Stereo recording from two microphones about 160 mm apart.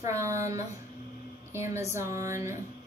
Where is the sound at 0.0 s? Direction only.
20° right (ahead or behind).